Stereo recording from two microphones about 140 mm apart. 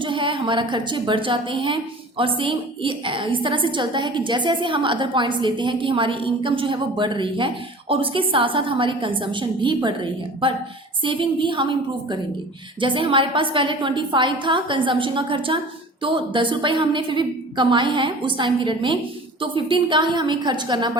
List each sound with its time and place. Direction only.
0.0 s a woman's voice: 35° right (ahead or behind)